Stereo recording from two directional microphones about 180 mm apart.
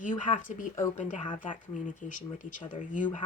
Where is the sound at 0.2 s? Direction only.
45° left (ahead or behind).